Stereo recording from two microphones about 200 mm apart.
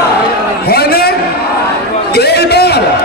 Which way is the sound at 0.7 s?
50° left (ahead or behind).